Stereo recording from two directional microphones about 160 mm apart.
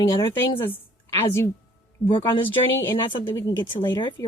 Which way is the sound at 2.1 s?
35° left (ahead or behind).